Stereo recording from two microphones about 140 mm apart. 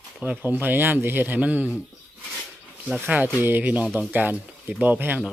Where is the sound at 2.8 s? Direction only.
10° right (ahead or behind).